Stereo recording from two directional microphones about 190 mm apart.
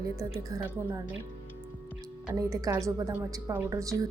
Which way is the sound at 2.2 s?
15° right (ahead or behind).